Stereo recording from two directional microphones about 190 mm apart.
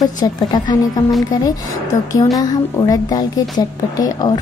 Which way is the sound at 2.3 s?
20° left (ahead or behind).